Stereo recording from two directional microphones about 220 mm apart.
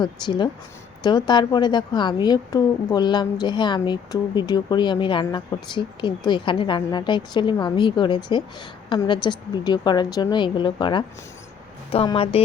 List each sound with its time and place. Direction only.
0.0 s a woman's voice: 20° left (ahead or behind)